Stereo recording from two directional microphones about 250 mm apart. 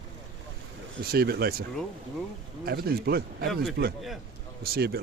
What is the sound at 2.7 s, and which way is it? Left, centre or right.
A man's voice, right.